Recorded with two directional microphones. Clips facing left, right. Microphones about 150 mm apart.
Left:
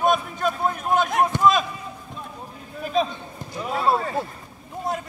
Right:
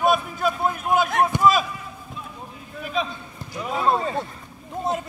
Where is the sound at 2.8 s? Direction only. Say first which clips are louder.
Left 4 dB; 40° left (ahead or behind).